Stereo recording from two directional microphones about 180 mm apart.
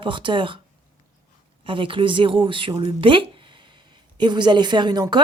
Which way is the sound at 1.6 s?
30° right (ahead or behind).